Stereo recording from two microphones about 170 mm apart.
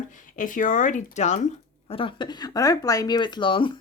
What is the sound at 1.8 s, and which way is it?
Speech, 30° left (ahead or behind).